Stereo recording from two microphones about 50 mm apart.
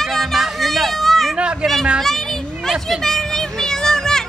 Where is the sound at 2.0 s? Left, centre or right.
Centre.